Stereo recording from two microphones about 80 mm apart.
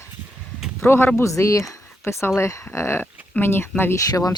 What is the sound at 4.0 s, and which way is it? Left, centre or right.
Speech, left.